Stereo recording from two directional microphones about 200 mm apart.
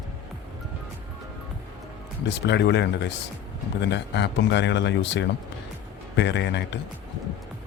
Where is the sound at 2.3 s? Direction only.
60° left (ahead or behind).